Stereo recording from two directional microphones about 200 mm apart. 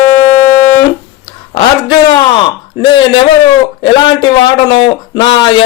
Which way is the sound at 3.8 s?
25° left (ahead or behind).